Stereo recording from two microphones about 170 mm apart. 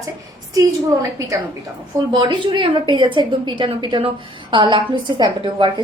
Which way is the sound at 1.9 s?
25° right (ahead or behind).